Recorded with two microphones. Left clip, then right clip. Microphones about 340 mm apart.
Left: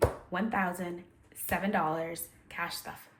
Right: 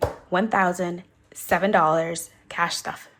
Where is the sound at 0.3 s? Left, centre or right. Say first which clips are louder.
Right 11 dB; centre.